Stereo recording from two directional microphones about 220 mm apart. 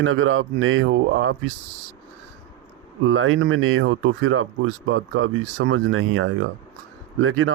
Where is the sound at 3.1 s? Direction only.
65° right (ahead or behind).